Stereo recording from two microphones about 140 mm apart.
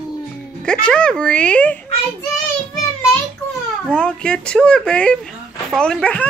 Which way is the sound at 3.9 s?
5° left (ahead or behind).